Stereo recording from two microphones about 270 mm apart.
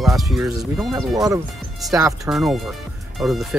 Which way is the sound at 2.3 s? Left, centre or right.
Centre.